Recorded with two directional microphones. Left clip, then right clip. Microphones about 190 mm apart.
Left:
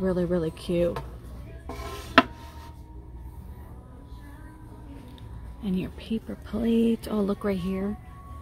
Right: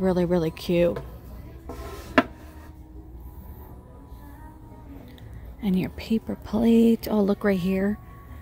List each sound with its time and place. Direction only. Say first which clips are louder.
0.0 s speech: right 3 dB; 15° right (ahead or behind)
5.6 s speech: right 4 dB; 25° right (ahead or behind)